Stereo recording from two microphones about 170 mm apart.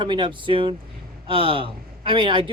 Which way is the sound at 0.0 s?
25° right (ahead or behind).